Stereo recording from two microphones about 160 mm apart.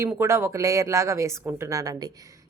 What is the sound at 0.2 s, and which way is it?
A woman's voice, 15° right (ahead or behind).